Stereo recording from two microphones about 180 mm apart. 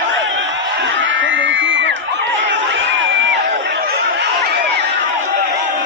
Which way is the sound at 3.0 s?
90° right.